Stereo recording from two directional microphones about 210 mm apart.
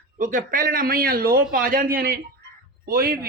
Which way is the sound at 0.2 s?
40° right (ahead or behind).